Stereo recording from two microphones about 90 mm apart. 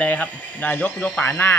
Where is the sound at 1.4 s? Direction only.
20° left (ahead or behind).